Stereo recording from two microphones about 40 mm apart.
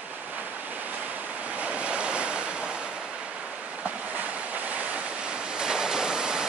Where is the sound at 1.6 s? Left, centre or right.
Right.